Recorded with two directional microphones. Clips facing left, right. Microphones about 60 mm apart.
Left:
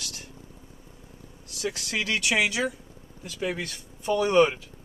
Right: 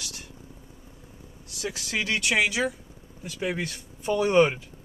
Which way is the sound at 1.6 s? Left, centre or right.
Centre.